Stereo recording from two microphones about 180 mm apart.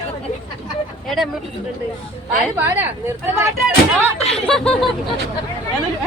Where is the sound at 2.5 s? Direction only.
10° right (ahead or behind).